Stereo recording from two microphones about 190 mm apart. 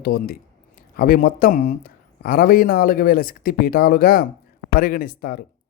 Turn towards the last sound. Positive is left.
turn(degrees=50)  # may be behind; listen again after turning